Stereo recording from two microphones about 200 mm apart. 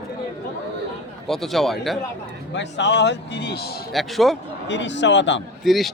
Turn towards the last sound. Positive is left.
turn(degrees=0)  # may be behind; listen again after turning